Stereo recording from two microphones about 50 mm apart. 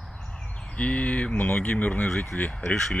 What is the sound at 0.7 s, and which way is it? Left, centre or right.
Speech, left.